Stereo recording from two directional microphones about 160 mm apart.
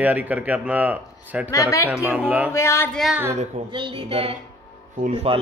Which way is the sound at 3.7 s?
30° right (ahead or behind).